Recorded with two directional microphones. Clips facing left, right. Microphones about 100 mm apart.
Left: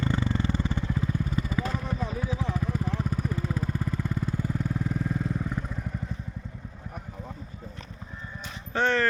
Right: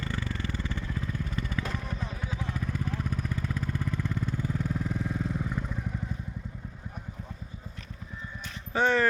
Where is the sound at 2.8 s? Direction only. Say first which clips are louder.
Left 3 dB; 10° left (ahead or behind).